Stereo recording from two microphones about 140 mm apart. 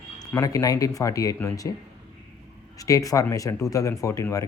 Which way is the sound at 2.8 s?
25° left (ahead or behind).